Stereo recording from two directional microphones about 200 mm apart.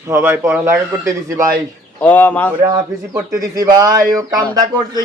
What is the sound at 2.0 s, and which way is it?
Speech, 10° left (ahead or behind).